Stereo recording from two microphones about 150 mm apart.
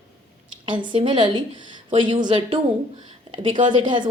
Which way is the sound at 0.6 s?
35° right (ahead or behind).